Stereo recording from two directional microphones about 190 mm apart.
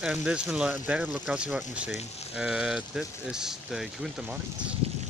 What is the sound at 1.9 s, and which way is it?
Speech, 35° left (ahead or behind).